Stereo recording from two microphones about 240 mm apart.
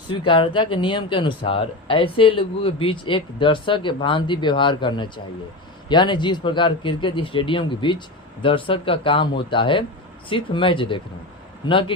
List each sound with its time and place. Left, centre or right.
0.1 s speech: left